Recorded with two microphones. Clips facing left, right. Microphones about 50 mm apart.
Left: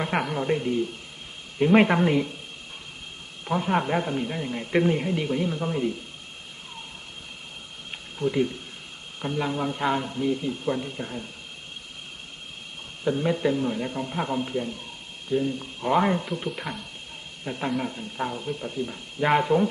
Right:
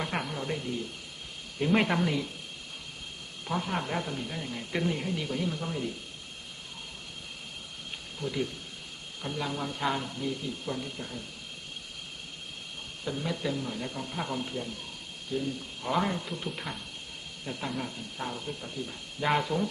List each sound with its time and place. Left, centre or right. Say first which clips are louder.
0.0 s speech: left 7 dB; centre
3.4 s speech: left 7 dB; centre
7.9 s a sound: left 9 dB; left
9.2 s speech: left 7 dB; left
13.1 s speech: left 9 dB; left
16.5 s speech: left 5 dB; centre
17.4 s speech: left 7 dB; left